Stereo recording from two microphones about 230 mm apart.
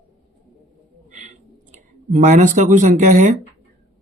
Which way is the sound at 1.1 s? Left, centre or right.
Right.